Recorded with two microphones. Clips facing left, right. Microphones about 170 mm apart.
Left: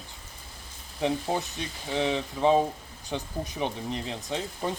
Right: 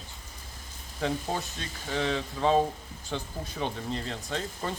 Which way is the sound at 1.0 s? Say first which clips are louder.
Left 3 dB; 15° left (ahead or behind).